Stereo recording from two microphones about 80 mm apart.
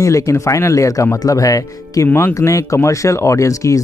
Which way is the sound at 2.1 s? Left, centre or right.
Left.